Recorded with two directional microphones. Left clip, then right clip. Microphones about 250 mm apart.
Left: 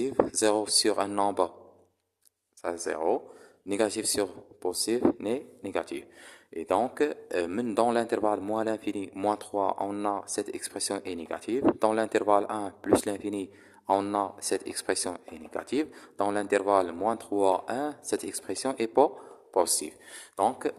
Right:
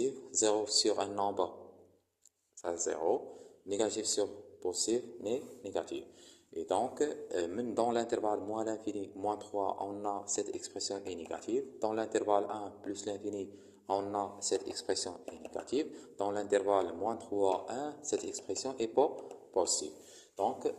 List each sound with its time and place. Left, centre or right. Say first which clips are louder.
0.3 s speech: left 5 dB; left
2.6 s speech: left 4 dB; left
13.2 s speech: left 5 dB; left
13.8 s speech: left 8 dB; left